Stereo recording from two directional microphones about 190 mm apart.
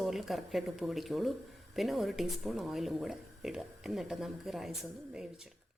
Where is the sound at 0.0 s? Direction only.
Centre (ahead or behind).